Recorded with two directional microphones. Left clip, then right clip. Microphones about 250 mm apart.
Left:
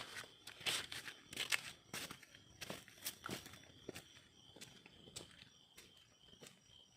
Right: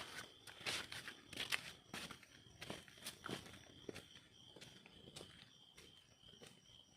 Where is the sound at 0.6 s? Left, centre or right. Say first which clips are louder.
Left 3 dB; left.